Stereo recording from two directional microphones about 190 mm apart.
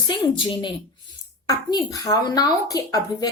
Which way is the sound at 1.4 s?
20° left (ahead or behind).